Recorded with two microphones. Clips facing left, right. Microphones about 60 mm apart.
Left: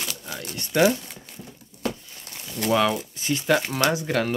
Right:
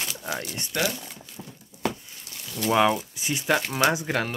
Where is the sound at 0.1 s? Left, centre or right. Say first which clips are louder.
Right 4 dB; right.